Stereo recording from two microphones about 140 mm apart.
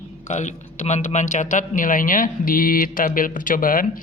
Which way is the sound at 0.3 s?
55° left (ahead or behind).